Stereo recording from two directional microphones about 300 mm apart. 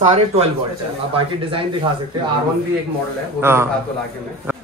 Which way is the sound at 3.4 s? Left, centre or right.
Centre.